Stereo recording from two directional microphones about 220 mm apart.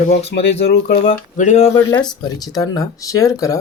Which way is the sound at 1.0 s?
30° left (ahead or behind).